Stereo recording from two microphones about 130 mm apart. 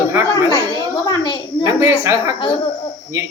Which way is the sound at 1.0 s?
35° left (ahead or behind).